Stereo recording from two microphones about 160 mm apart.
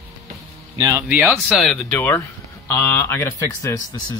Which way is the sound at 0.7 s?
20° right (ahead or behind).